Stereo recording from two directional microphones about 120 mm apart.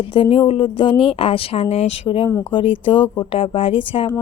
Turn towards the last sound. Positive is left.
turn(degrees=50)  # may be behind; listen again after turning